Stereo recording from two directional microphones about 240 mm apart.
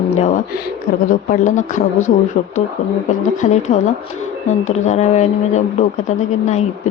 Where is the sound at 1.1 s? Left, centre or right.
Left.